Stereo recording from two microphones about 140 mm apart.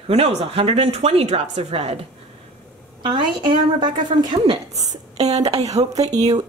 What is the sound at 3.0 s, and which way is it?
A woman's voice, 35° right (ahead or behind).